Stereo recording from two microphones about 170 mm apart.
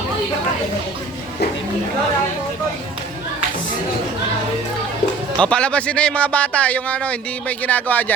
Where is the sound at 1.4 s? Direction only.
75° left (ahead or behind).